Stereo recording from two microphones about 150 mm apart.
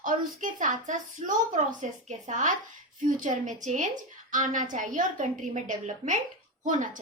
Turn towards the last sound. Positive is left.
turn(degrees=-55)  # may be behind; listen again after turning